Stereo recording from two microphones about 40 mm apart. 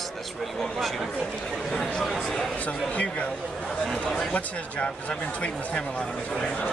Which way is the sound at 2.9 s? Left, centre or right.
Left.